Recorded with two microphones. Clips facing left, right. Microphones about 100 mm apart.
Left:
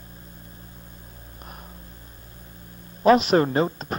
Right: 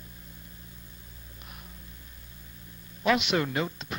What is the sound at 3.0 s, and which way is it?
Speech, 40° left (ahead or behind).